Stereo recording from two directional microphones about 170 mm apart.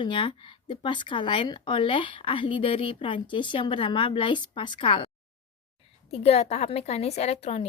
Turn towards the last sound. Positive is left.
turn(degrees=35)  # may be behind; listen again after turning